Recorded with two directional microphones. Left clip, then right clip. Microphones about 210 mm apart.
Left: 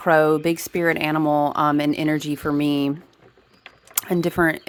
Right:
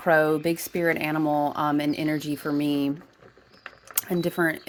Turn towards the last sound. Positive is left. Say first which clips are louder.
# left 5 dB
turn(degrees=25)  # may be behind; listen again after turning